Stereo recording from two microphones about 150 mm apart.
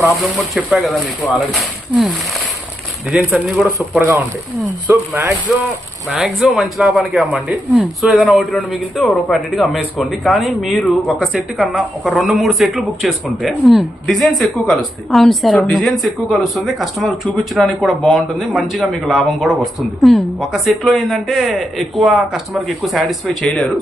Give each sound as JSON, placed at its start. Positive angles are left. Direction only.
{"t": 0.2, "sound": "a man's voice", "side_deg": 0}
{"t": 6.1, "sound": "a man's voice", "side_deg": -5}